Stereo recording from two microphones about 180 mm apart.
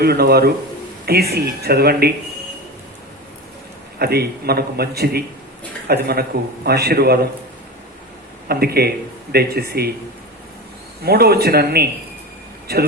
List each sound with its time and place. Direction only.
0.0 s a man's voice: 60° right (ahead or behind)
3.9 s a man's voice: 60° right (ahead or behind)
8.4 s a man's voice: 60° right (ahead or behind)
11.0 s a man's voice: 60° right (ahead or behind)